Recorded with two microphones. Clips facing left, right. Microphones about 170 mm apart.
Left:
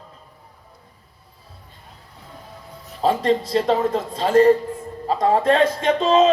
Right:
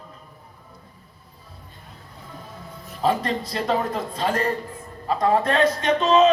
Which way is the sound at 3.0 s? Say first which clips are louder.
Left 4 dB; 30° left (ahead or behind).